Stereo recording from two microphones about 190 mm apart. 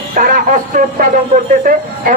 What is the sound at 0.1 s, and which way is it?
A man's voice, 45° right (ahead or behind).